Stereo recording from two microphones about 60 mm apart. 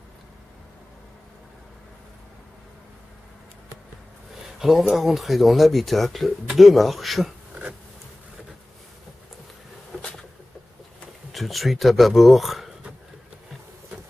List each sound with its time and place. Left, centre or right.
4.6 s speech: centre
11.3 s speech: centre